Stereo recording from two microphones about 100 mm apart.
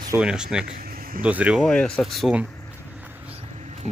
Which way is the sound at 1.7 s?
10° left (ahead or behind).